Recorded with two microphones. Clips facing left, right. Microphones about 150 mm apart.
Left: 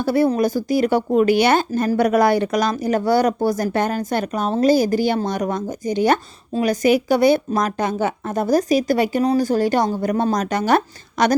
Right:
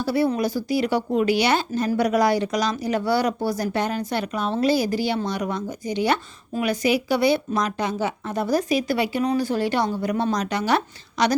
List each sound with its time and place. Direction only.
0.0 s speech: 50° left (ahead or behind)